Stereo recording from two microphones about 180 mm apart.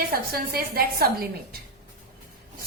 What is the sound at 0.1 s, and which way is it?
Speech, 55° right (ahead or behind).